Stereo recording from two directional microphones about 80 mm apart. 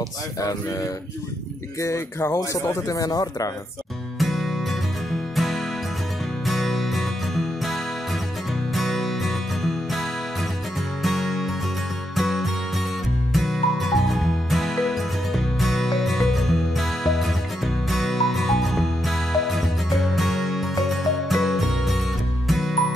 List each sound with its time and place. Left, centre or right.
1.8 s speech: left
4.2 s music: centre
8.7 s music: centre